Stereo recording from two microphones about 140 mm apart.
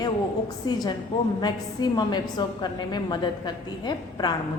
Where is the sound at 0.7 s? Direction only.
30° left (ahead or behind).